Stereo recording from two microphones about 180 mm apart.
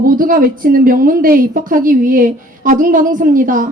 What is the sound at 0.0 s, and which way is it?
A woman's voice, 50° right (ahead or behind).